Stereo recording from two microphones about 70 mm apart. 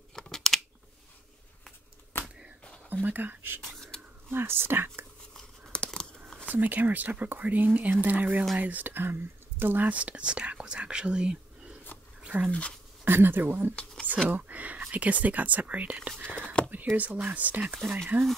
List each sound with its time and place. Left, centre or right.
0.1 s a sound: centre
2.9 s speech: right
5.7 s tearing: centre
6.5 s speech: right
12.2 s a sound: right
12.4 s speech: centre
13.0 s speech: right
16.3 s a sound: right
16.9 s speech: right